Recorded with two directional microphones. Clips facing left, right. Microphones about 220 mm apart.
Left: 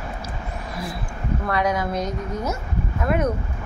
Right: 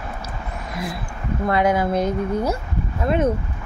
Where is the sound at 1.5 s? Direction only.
25° right (ahead or behind).